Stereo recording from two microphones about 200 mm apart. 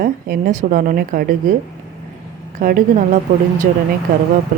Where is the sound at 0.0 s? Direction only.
40° right (ahead or behind).